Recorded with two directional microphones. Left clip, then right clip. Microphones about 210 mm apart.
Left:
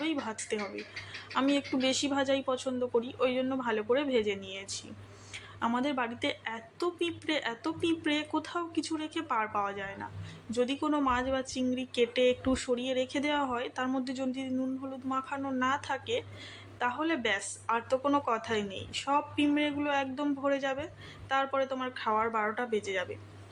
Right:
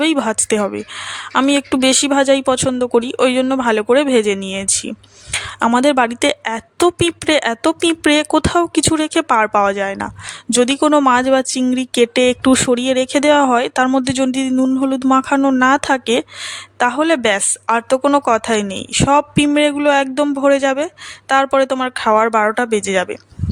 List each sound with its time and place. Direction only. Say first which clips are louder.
0.0 s a woman's voice: right 18 dB; 50° right (ahead or behind)